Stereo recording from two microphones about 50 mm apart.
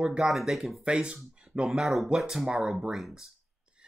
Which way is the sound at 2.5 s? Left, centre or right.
Centre.